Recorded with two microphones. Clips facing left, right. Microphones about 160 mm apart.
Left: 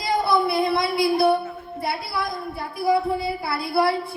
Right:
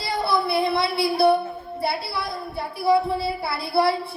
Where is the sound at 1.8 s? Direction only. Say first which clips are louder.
Even; 30° right (ahead or behind).